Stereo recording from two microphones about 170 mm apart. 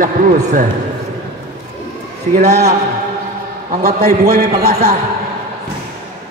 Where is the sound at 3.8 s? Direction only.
60° right (ahead or behind).